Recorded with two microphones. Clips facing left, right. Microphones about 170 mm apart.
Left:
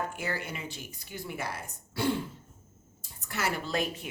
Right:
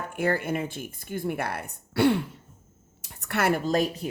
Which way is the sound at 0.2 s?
55° right (ahead or behind).